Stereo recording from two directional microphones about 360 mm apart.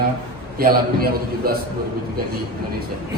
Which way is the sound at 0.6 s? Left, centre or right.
Right.